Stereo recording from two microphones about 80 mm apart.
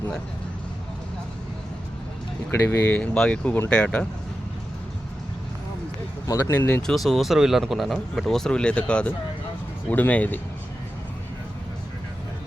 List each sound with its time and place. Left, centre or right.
2.5 s speech: left
2.9 s speech: centre
6.2 s speech: left
6.5 s speech: left
6.8 s speech: centre; by 10.4 s left